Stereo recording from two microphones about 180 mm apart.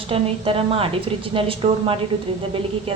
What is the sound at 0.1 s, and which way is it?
A woman's voice, 30° right (ahead or behind).